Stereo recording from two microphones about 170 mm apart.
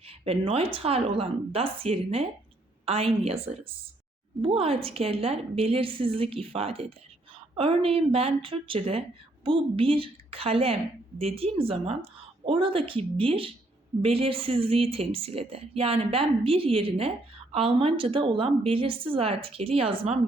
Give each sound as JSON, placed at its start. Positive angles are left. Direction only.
{"t": 0.0, "sound": "speech", "side_deg": -35}